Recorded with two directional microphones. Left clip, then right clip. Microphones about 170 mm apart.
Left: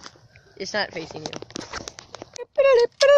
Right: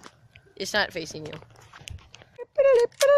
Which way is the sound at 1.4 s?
35° right (ahead or behind).